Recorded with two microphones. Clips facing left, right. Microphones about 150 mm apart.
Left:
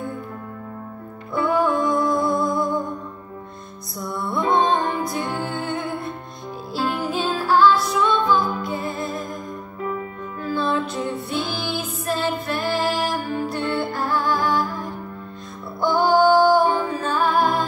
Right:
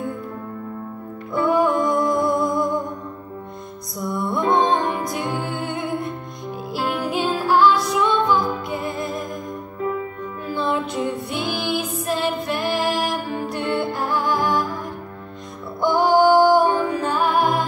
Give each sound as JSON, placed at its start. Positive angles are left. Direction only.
{"t": 1.3, "sound": "music", "side_deg": -15}
{"t": 4.0, "sound": "music", "side_deg": -15}
{"t": 10.4, "sound": "music", "side_deg": -20}
{"t": 15.8, "sound": "music", "side_deg": -15}